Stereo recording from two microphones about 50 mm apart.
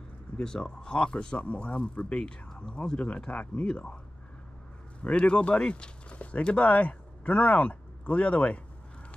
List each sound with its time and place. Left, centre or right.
0.4 s speech: centre
5.0 s speech: left